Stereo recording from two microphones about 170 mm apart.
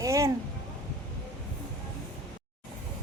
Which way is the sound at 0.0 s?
20° right (ahead or behind).